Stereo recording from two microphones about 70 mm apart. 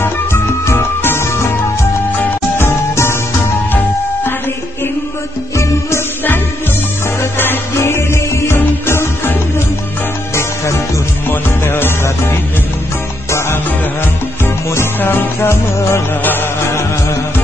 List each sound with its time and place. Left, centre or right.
0.0 s music: left
5.6 s music: left
10.3 s music: left
14.4 s music: left
16.2 s music: left